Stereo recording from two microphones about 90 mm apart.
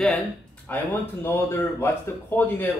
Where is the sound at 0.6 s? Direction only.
20° left (ahead or behind).